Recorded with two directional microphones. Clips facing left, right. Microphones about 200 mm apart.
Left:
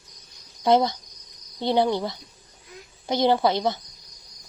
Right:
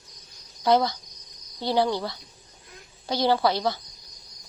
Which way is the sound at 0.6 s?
20° left (ahead or behind).